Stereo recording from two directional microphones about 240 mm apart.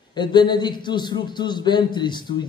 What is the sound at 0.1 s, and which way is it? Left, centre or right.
A man's voice, centre.